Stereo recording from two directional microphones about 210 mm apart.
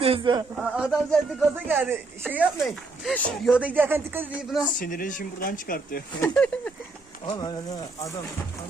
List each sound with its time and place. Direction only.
0.0 s a sound: 25° right (ahead or behind)
0.5 s a sound: 5° right (ahead or behind)
2.2 s speech: 5° right (ahead or behind)
4.8 s speech: 40° left (ahead or behind)
6.2 s speech: 5° left (ahead or behind)
7.3 s speech: 20° left (ahead or behind)